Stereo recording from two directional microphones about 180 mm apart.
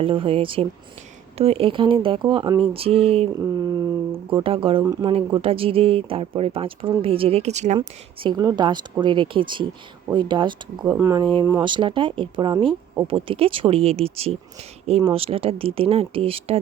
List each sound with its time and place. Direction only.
0.0 s speech: 30° right (ahead or behind)
3.3 s a sound: 20° right (ahead or behind)
4.4 s speech: 30° right (ahead or behind)
7.8 s speech: 25° right (ahead or behind)
10.8 s speech: 15° right (ahead or behind)
11.6 s speech: 25° right (ahead or behind)